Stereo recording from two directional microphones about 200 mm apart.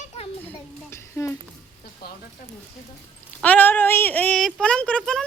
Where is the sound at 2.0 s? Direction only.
55° left (ahead or behind).